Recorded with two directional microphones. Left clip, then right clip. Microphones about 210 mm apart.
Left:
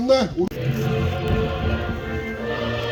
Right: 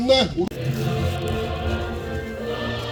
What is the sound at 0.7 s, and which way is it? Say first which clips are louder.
Music: left 2 dB; 50° left (ahead or behind).